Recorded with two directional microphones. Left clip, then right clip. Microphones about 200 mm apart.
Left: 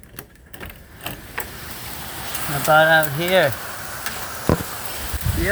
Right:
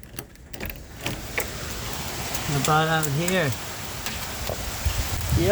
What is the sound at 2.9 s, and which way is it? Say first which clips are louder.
Speech: left 8 dB; 20° left (ahead or behind).